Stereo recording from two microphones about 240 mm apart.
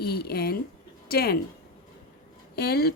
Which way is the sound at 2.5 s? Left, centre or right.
Left.